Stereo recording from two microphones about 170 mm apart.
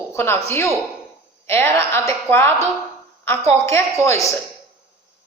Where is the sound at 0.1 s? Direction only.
15° left (ahead or behind).